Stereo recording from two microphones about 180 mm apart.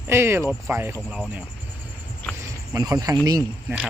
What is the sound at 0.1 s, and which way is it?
Speech, 15° right (ahead or behind).